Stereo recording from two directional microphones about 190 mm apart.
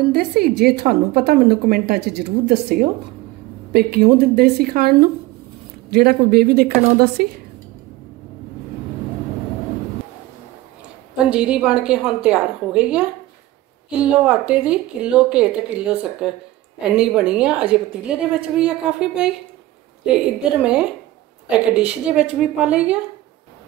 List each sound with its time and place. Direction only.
0.1 s a woman's voice: 55° right (ahead or behind)
11.2 s a woman's voice: 5° right (ahead or behind)
20.6 s a woman's voice: 5° right (ahead or behind)